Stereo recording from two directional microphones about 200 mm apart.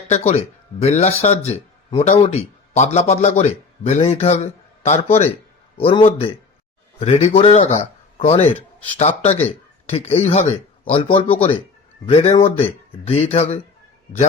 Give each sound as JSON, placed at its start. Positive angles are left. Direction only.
{"t": 0.1, "sound": "a man's voice", "side_deg": 30}